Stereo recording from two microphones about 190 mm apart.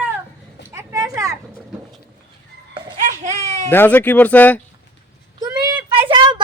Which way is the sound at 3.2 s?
35° right (ahead or behind).